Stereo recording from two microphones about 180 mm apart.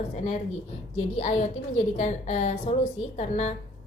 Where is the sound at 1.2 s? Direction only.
40° left (ahead or behind).